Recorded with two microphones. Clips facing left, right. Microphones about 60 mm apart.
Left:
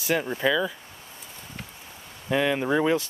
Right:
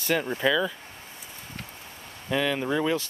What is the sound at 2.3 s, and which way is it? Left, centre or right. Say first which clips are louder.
Speech: left 3 dB; centre.